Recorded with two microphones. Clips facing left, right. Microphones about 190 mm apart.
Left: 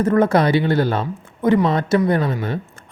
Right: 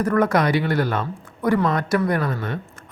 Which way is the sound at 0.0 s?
25° left (ahead or behind).